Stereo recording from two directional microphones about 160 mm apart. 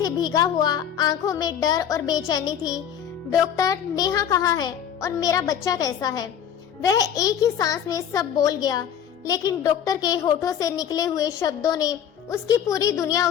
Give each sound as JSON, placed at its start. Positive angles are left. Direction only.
{"t": 0.0, "sound": "a child's voice", "side_deg": 25}